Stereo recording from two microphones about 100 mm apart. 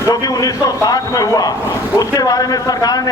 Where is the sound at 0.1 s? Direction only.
40° left (ahead or behind).